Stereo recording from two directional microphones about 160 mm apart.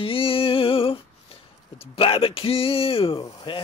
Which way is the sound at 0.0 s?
35° left (ahead or behind).